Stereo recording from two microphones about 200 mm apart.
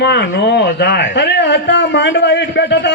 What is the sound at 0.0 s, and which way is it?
A man's voice, 60° left (ahead or behind).